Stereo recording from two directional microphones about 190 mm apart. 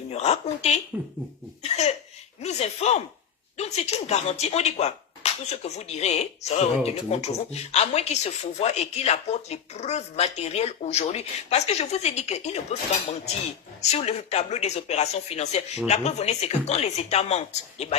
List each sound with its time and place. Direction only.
0.1 s speech: 35° left (ahead or behind)
1.6 s a sound: 35° left (ahead or behind)
2.4 s speech: 35° left (ahead or behind)
13.9 s speech: 35° left (ahead or behind)